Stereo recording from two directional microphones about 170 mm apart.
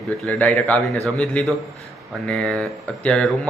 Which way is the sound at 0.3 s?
10° left (ahead or behind).